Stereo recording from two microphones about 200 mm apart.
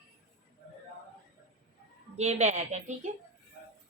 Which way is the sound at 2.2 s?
35° right (ahead or behind).